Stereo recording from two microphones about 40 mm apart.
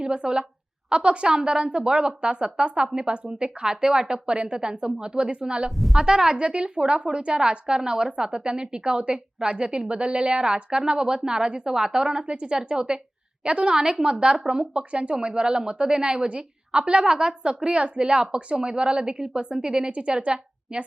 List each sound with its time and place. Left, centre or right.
0.0 s a woman's voice: right
5.6 s a woman's voice: centre
6.0 s a woman's voice: centre